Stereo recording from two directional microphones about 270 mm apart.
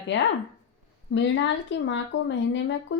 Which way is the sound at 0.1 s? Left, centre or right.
Left.